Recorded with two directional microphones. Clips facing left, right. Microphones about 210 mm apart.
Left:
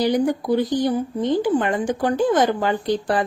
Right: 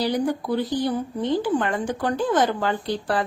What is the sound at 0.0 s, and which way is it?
A woman's voice, 15° left (ahead or behind).